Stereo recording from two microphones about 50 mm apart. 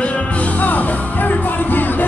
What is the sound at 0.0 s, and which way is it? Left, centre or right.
Music, left.